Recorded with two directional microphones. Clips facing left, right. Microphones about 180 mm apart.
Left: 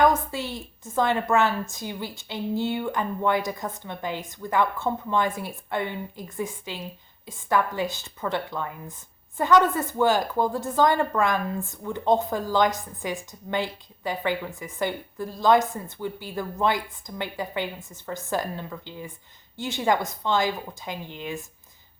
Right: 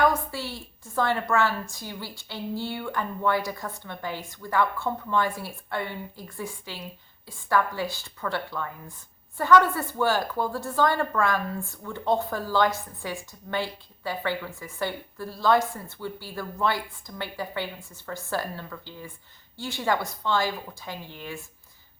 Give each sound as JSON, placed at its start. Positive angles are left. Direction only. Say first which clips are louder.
{"t": 0.0, "sound": "a woman's voice", "louder": "left 3 dB", "side_deg": 20}